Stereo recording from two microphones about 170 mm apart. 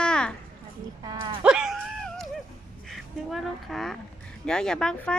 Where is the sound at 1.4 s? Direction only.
5° right (ahead or behind).